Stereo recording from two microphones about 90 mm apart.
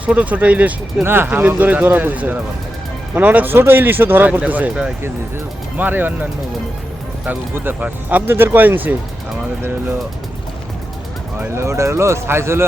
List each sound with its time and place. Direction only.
0.0 s speech: 15° right (ahead or behind)
7.3 s speech: 20° right (ahead or behind)
11.3 s speech: 30° right (ahead or behind)